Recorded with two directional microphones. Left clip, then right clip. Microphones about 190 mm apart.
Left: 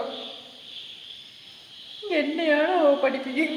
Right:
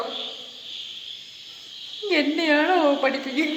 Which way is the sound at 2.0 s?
10° right (ahead or behind).